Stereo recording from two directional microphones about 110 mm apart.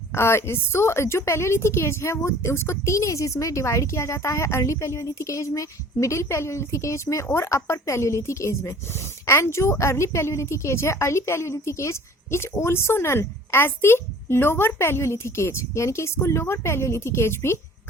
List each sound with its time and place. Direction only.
0.1 s a woman's voice: 25° left (ahead or behind)